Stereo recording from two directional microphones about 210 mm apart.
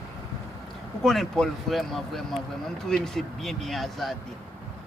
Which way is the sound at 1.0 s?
Centre (ahead or behind).